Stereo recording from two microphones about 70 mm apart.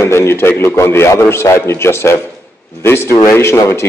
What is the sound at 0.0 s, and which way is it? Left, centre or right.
A man's voice, left.